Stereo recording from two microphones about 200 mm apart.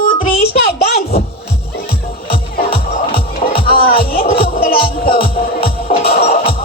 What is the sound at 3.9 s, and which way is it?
Speech, 50° left (ahead or behind).